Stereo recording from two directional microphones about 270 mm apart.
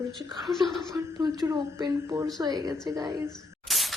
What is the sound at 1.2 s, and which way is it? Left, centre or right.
Speech, centre.